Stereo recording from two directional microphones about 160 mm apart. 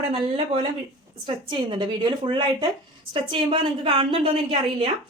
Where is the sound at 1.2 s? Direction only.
30° right (ahead or behind).